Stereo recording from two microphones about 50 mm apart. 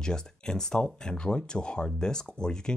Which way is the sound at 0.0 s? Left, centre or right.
Centre.